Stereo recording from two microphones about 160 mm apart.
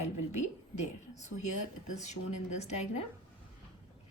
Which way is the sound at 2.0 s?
45° left (ahead or behind).